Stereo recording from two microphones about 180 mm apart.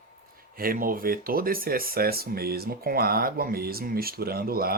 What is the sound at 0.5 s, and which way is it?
Speech, 55° right (ahead or behind).